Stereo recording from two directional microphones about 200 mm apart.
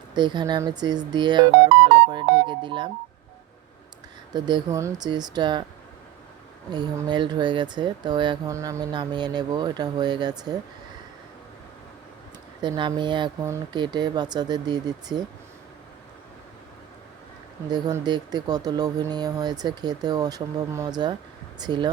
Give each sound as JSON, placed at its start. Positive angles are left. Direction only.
{"t": 0.1, "sound": "speech", "side_deg": -20}
{"t": 4.4, "sound": "speech", "side_deg": -20}
{"t": 6.7, "sound": "speech", "side_deg": -20}
{"t": 12.6, "sound": "speech", "side_deg": -25}
{"t": 17.7, "sound": "speech", "side_deg": -20}